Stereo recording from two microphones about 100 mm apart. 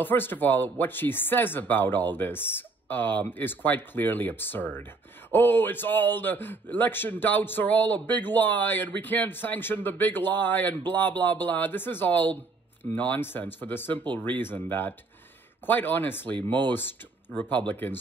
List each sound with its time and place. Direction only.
0.0 s speech: 20° left (ahead or behind)